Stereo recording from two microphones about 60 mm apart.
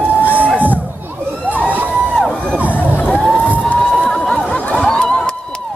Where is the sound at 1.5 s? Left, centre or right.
Right.